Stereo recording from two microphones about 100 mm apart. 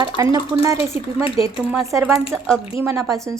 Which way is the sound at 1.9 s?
30° right (ahead or behind).